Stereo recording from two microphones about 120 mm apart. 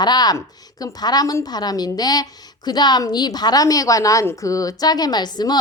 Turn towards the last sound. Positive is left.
turn(degrees=35)  # may be behind; listen again after turning